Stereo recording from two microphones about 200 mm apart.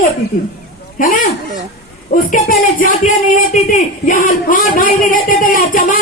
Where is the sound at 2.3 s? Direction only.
45° left (ahead or behind).